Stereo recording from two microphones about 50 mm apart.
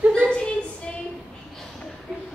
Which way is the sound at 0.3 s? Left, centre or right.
Left.